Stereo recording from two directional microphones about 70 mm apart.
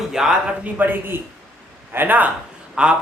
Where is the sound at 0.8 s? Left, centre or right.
Right.